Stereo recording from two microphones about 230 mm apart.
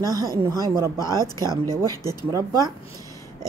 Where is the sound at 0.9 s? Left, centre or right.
Centre.